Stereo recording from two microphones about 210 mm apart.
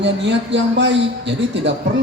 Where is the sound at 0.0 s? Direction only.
55° right (ahead or behind).